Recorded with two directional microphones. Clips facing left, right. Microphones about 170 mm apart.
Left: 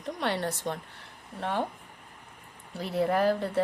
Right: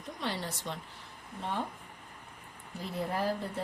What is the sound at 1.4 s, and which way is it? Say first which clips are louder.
Speech: left 5 dB; 70° left (ahead or behind).